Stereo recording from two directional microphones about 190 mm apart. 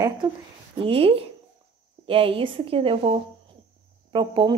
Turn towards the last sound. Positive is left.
turn(degrees=-25)  # may be behind; listen again after turning